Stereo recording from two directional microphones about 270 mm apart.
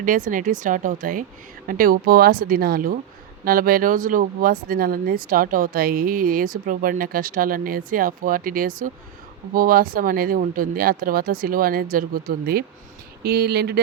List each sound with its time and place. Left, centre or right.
0.0 s speech: right